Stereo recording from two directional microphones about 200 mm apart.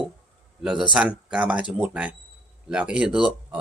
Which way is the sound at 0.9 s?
5° right (ahead or behind).